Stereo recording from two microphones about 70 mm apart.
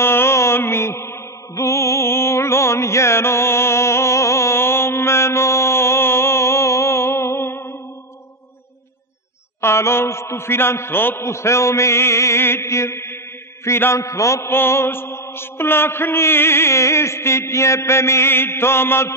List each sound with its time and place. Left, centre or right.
0.0 s mantra: left
9.6 s a man's voice: left
13.7 s mantra: left